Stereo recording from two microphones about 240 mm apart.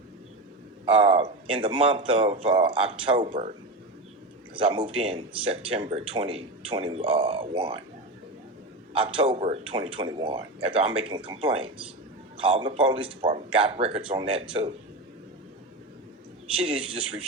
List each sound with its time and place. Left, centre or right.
0.9 s speech: right
4.5 s speech: right
8.9 s speech: right
16.6 s speech: right